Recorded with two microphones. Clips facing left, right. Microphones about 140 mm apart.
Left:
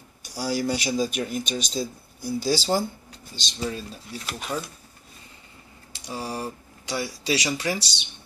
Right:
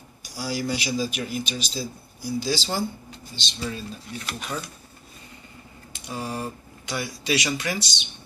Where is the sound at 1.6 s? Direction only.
5° right (ahead or behind).